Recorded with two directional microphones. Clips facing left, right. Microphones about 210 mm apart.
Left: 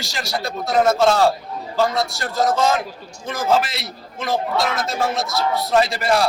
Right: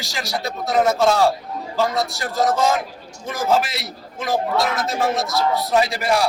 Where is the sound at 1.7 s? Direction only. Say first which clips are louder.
Left 1 dB; 15° right (ahead or behind).